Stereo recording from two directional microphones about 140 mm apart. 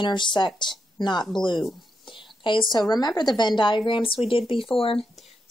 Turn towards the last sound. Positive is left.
turn(degrees=40)  # may be behind; listen again after turning